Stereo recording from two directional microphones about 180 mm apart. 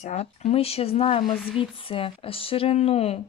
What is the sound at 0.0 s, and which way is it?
Speech, 40° left (ahead or behind).